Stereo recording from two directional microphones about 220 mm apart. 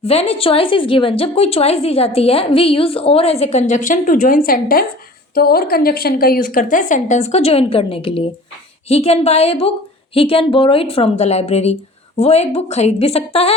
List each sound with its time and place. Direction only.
0.0 s a woman's voice: 30° left (ahead or behind)